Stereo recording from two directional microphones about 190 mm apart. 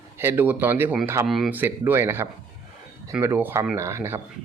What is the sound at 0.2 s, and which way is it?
Speech, 10° right (ahead or behind).